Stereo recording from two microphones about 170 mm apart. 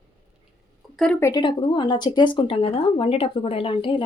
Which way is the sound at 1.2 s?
20° left (ahead or behind).